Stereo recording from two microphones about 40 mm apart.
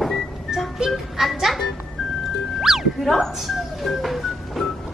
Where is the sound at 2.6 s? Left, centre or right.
Centre.